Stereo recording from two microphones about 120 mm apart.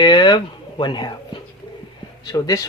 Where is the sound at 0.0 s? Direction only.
40° left (ahead or behind).